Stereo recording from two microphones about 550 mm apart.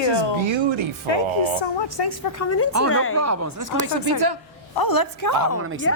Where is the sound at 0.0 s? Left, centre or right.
Left.